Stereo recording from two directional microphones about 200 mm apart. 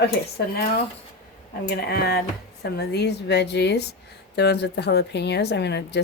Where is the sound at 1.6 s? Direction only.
55° left (ahead or behind).